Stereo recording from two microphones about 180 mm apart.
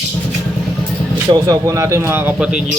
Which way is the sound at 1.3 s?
20° right (ahead or behind).